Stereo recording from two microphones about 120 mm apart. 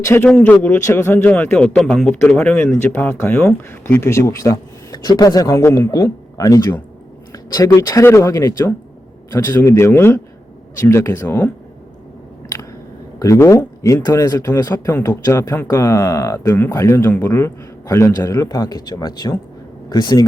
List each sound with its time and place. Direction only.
0.0 s a man's voice: 20° left (ahead or behind)
13.1 s a man's voice: 25° left (ahead or behind)